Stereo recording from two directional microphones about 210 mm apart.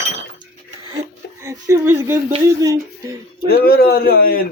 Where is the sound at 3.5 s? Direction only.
45° left (ahead or behind).